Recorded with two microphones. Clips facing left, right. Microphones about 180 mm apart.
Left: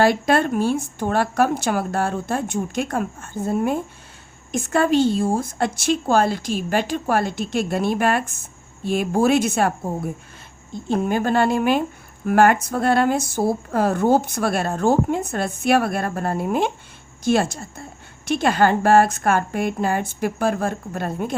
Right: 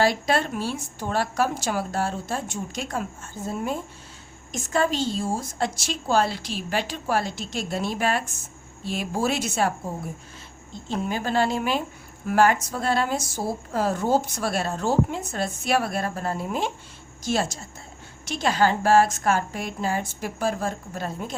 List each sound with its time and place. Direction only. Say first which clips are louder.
0.0 s a woman's voice: left 5 dB; 55° left (ahead or behind)